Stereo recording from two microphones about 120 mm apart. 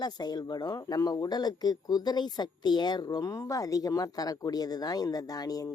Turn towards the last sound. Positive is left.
turn(degrees=30)  # may be behind; listen again after turning